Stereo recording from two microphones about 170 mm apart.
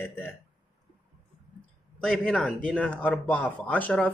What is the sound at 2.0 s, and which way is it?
Speech, 5° left (ahead or behind).